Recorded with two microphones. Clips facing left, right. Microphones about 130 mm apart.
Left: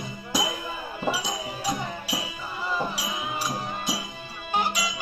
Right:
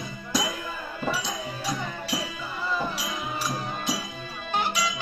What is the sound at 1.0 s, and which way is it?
Music, 15° left (ahead or behind).